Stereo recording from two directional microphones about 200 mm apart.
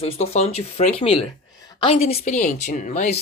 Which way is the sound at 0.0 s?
30° left (ahead or behind).